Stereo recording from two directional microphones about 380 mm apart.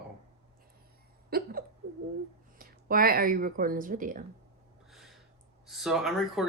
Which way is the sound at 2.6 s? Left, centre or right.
Right.